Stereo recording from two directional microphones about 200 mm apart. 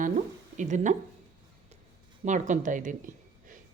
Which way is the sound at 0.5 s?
35° right (ahead or behind).